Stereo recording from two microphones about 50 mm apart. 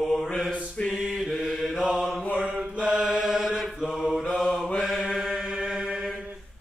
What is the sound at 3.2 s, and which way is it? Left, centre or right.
Chant, centre.